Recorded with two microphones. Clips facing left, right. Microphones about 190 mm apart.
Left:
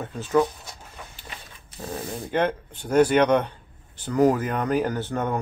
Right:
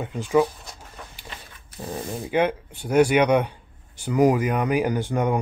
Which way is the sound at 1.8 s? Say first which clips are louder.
Right 1 dB; 10° right (ahead or behind).